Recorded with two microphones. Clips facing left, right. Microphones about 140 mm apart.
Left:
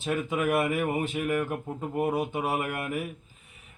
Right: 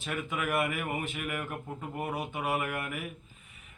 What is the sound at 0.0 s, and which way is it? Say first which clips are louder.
A man's voice: left 7 dB; 30° left (ahead or behind).